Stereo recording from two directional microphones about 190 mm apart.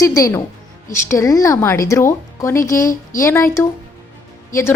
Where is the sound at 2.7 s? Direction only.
45° left (ahead or behind).